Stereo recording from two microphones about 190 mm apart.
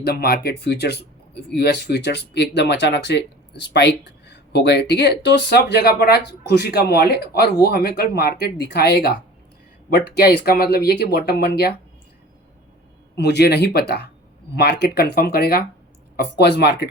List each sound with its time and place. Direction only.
0.0 s speech: 55° left (ahead or behind)
13.1 s speech: 60° left (ahead or behind)